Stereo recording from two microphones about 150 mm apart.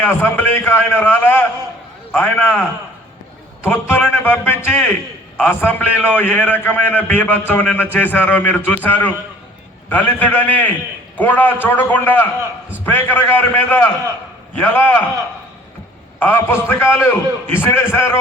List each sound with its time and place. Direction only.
0.0 s a man's voice: 10° left (ahead or behind)
3.6 s a man's voice: 10° left (ahead or behind)
16.2 s a man's voice: 15° left (ahead or behind)